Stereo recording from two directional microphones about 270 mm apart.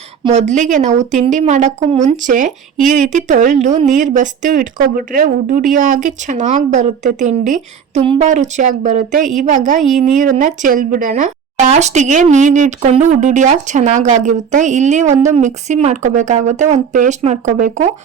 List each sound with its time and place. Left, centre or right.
0.3 s a woman's voice: right